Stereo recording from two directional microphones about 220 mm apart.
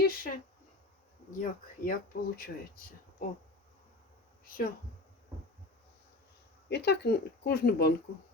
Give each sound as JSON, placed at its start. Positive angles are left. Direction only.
{"t": 0.0, "sound": "speech", "side_deg": 40}
{"t": 4.4, "sound": "speech", "side_deg": 40}
{"t": 6.7, "sound": "speech", "side_deg": 50}